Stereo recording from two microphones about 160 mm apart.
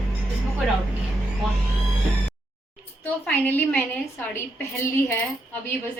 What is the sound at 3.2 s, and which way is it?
Speech, 10° left (ahead or behind).